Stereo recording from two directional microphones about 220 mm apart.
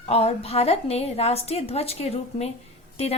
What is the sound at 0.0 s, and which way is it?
A woman's voice, 25° left (ahead or behind).